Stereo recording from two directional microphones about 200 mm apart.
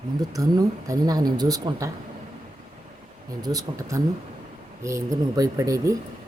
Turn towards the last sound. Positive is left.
turn(degrees=-15)  # may be behind; listen again after turning